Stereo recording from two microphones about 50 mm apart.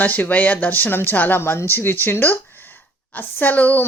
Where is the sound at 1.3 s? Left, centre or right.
Left.